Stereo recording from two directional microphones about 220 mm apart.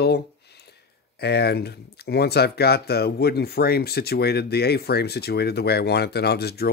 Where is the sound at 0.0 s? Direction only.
45° left (ahead or behind).